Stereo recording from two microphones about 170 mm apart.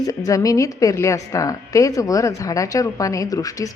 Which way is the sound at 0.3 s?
20° left (ahead or behind).